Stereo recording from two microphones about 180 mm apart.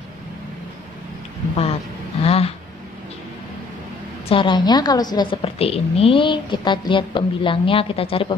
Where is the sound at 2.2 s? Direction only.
35° left (ahead or behind).